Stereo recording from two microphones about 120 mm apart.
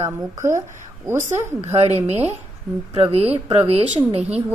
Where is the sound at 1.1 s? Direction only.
60° right (ahead or behind).